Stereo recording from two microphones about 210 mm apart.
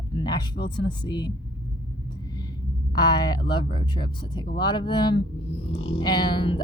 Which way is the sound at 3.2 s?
20° left (ahead or behind).